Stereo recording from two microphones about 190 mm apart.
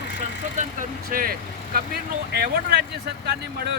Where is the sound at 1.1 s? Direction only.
50° right (ahead or behind).